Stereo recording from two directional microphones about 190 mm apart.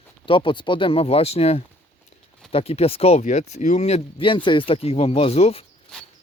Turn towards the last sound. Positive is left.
turn(degrees=35)  # may be behind; listen again after turning